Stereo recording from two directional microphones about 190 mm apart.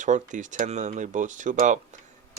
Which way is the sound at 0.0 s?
40° right (ahead or behind).